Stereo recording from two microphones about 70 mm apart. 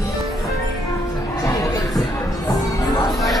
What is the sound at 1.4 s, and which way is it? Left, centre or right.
Music, left.